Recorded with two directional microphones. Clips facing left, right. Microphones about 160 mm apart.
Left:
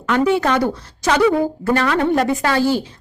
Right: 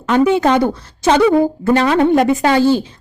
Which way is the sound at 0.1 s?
20° right (ahead or behind).